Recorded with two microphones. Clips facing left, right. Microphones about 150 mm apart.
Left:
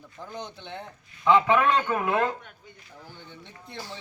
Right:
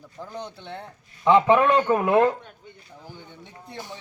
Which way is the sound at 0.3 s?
35° right (ahead or behind).